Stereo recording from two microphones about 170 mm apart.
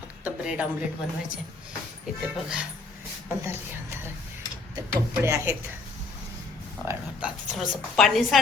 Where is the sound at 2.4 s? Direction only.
5° right (ahead or behind).